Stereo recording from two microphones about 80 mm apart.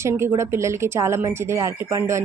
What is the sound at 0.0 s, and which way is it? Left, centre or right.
Speech, right.